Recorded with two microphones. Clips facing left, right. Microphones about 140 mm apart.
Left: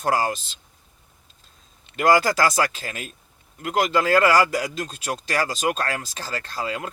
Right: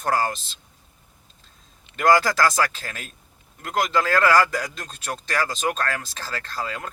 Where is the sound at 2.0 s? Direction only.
15° left (ahead or behind).